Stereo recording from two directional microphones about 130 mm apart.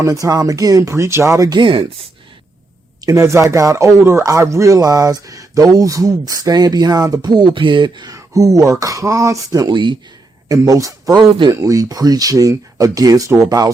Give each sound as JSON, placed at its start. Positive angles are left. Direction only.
{"t": 0.0, "sound": "speech", "side_deg": -25}
{"t": 3.1, "sound": "speech", "side_deg": -20}
{"t": 10.5, "sound": "speech", "side_deg": -25}
{"t": 11.1, "sound": "speech", "side_deg": -35}
{"t": 11.6, "sound": "speech", "side_deg": -25}